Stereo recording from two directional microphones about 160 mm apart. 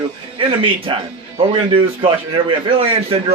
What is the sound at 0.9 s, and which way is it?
Speech, 30° right (ahead or behind).